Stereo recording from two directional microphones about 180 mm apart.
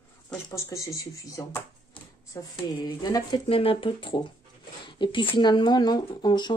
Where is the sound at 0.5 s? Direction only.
20° left (ahead or behind).